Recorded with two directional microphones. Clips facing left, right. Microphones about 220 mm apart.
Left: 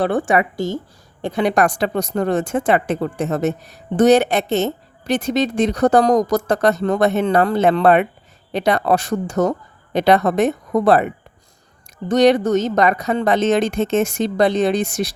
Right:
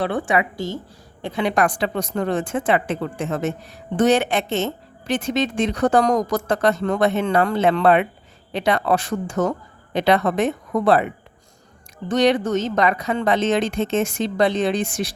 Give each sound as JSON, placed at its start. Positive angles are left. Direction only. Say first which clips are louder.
{"t": 0.0, "sound": "a woman's voice", "louder": "left 4 dB", "side_deg": 45}